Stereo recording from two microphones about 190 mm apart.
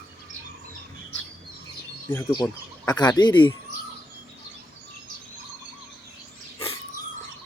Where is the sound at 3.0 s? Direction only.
20° left (ahead or behind).